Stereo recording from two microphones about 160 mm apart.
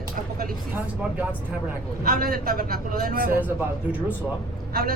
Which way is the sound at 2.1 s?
70° right (ahead or behind).